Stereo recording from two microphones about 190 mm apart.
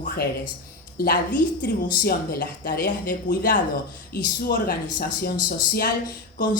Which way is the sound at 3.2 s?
45° left (ahead or behind).